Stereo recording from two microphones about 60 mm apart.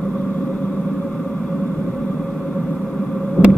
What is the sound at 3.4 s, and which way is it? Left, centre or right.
Hum, left.